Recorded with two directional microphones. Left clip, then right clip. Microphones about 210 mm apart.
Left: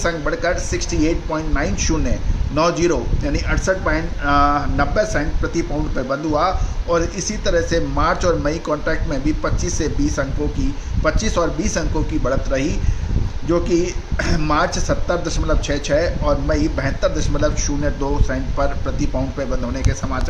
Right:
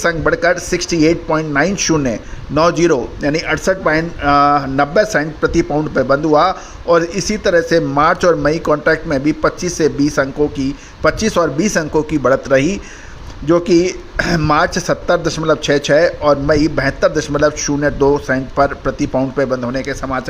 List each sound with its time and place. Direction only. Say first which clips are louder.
0.0 s a man's voice: right 6 dB; 40° right (ahead or behind)